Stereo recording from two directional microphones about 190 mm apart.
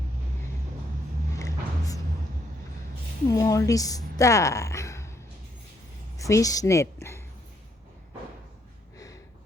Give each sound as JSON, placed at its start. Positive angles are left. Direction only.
{"t": 1.4, "sound": "a sound", "side_deg": 15}
{"t": 3.2, "sound": "a woman's voice", "side_deg": 20}
{"t": 6.1, "sound": "a woman's voice", "side_deg": 15}